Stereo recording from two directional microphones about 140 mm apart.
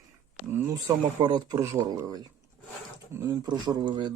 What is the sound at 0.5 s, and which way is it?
Speech, 20° right (ahead or behind).